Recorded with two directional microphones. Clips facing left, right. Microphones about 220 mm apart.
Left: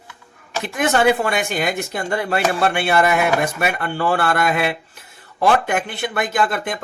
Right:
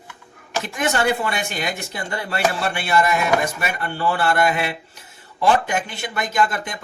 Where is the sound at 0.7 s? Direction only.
55° left (ahead or behind).